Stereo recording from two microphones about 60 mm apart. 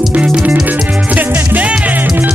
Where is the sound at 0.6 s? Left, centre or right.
Right.